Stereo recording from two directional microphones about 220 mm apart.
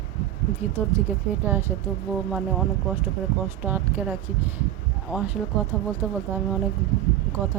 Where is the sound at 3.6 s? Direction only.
10° right (ahead or behind).